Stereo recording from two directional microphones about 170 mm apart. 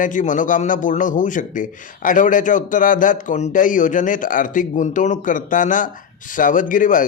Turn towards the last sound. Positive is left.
turn(degrees=50)  # may be behind; listen again after turning